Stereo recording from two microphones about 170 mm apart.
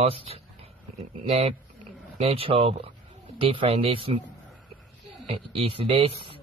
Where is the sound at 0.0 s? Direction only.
35° right (ahead or behind).